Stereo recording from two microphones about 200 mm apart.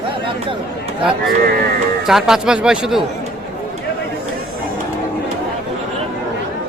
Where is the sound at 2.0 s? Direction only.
Centre (ahead or behind).